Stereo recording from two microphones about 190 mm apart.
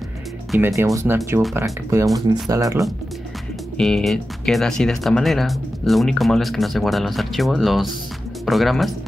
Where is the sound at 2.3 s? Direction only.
20° right (ahead or behind).